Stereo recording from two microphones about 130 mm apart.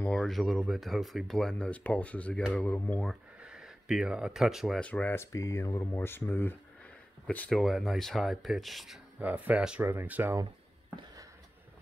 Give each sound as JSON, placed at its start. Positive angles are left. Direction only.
{"t": 0.0, "sound": "speech", "side_deg": 5}
{"t": 3.1, "sound": "speech", "side_deg": -5}
{"t": 4.8, "sound": "speech", "side_deg": 10}
{"t": 9.2, "sound": "speech", "side_deg": -10}